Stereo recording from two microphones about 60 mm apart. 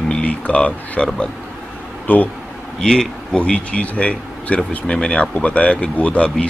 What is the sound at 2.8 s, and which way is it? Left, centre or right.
Speech, centre.